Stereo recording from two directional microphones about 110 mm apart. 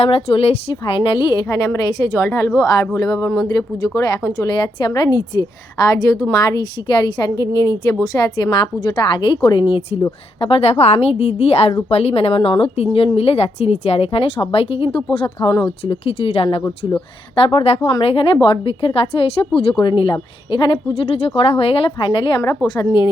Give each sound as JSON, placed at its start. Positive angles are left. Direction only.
{"t": 0.0, "sound": "a woman's voice", "side_deg": 60}
{"t": 4.4, "sound": "a woman's voice", "side_deg": 45}
{"t": 10.4, "sound": "a woman's voice", "side_deg": 65}
{"t": 22.4, "sound": "a woman's voice", "side_deg": 35}